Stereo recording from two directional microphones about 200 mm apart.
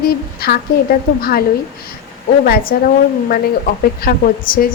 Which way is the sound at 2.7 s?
50° left (ahead or behind).